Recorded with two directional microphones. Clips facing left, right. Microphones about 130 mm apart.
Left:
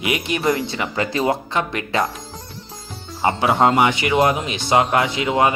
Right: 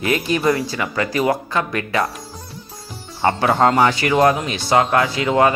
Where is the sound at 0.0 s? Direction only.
20° left (ahead or behind).